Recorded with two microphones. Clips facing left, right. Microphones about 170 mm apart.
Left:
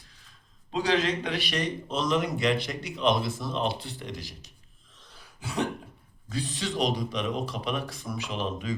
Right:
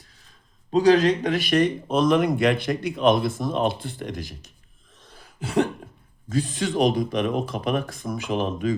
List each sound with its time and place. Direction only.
0.7 s speech: 40° right (ahead or behind)
5.1 s cough: 55° right (ahead or behind)
6.2 s speech: 45° right (ahead or behind)